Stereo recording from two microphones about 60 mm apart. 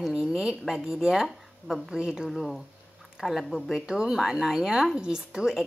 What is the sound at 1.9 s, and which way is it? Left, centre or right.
Speech, centre.